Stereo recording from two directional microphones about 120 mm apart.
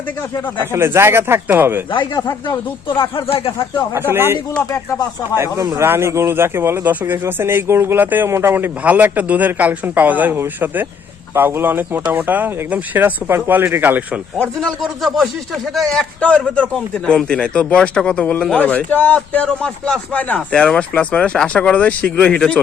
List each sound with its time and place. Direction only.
0.6 s speech: 20° right (ahead or behind)
2.1 s speech: 30° left (ahead or behind)
2.8 s speech: 45° left (ahead or behind)
4.1 s speech: 20° right (ahead or behind)
5.5 s speech: 25° right (ahead or behind)
14.3 s a man's voice: 10° left (ahead or behind)
14.8 s a man's voice: centre (ahead or behind)